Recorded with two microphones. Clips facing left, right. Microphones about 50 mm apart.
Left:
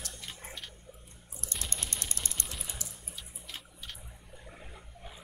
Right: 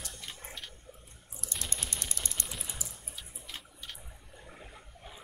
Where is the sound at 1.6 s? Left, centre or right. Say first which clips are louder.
Right 1 dB; right.